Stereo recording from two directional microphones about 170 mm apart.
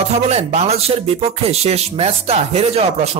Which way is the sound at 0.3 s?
40° right (ahead or behind).